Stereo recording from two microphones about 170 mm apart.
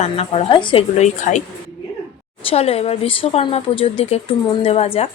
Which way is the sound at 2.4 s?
35° left (ahead or behind).